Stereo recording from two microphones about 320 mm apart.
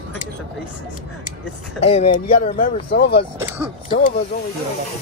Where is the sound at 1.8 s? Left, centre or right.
Centre.